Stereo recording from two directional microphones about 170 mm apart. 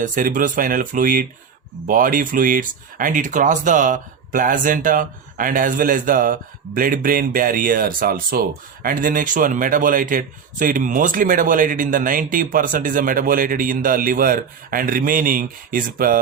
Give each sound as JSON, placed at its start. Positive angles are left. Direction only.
{"t": 0.0, "sound": "speech", "side_deg": -50}